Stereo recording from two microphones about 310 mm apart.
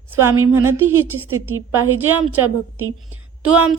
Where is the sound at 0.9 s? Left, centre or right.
Right.